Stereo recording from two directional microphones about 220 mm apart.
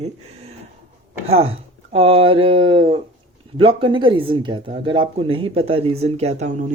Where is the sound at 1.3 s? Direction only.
25° right (ahead or behind).